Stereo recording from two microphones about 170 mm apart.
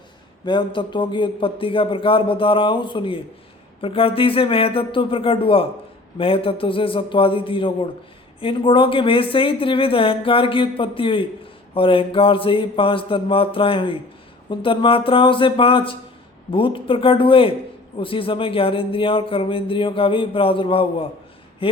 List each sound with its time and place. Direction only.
0.4 s a man's voice: 25° left (ahead or behind)